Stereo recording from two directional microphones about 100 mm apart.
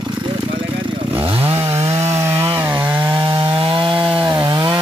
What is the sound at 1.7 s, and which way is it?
Wood, 90° right.